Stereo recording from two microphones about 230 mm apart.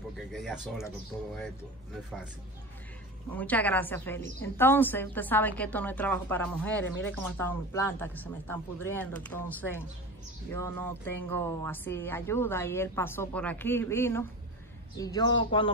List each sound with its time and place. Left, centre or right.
0.3 s speech: centre
3.3 s speech: centre